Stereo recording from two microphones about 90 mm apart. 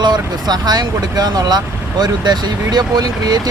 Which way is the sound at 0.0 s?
50° right (ahead or behind).